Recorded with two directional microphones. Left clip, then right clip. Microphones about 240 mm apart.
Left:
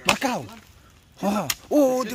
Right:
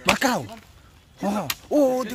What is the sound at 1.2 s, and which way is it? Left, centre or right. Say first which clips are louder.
Hoot: left 1 dB; centre.